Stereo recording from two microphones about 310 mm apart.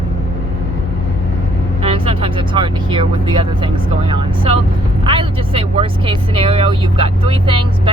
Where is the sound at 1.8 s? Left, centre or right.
Centre.